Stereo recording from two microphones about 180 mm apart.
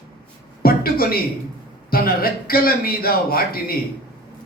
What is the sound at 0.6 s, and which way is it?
A man's voice, 55° left (ahead or behind).